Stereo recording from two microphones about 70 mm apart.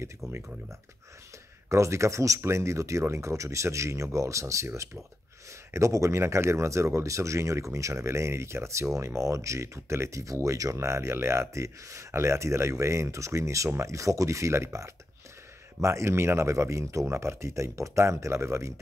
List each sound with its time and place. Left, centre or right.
0.3 s speech: right
1.7 s speech: right
5.7 s speech: right